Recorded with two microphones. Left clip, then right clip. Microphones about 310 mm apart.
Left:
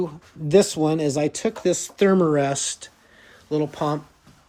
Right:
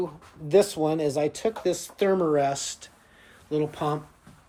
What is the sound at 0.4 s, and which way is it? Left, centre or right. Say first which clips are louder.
Speech: left 3 dB; left.